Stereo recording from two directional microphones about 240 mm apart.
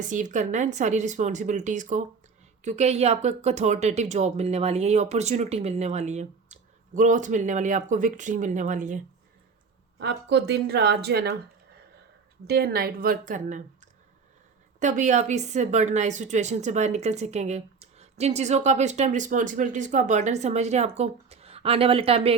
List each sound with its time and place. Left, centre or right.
0.1 s a woman's voice: right
10.0 s speech: right
12.5 s speech: right
14.8 s a woman's voice: right